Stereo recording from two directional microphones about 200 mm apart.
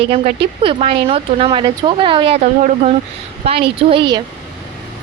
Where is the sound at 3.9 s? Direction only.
20° right (ahead or behind).